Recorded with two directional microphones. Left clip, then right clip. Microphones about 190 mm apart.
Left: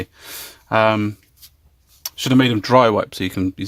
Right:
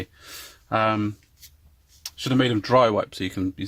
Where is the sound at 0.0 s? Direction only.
40° left (ahead or behind).